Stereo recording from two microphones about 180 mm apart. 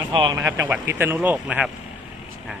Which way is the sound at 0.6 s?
15° right (ahead or behind).